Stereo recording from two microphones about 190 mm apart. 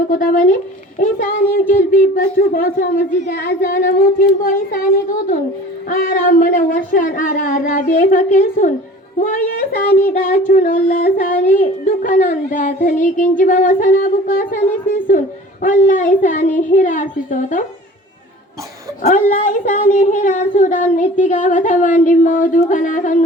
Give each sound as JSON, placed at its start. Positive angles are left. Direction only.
{"t": 0.1, "sound": "female singing", "side_deg": 45}
{"t": 1.7, "sound": "female singing", "side_deg": 45}
{"t": 15.6, "sound": "speech", "side_deg": 40}
{"t": 19.0, "sound": "speech", "side_deg": 45}